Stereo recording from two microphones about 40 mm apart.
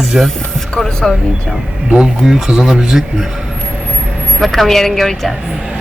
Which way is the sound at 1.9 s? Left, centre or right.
Right.